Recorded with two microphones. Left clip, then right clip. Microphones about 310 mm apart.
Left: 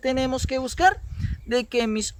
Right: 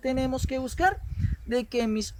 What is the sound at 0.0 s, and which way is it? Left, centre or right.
Speech, left.